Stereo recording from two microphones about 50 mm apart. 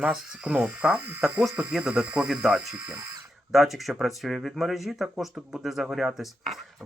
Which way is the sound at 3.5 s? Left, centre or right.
Centre.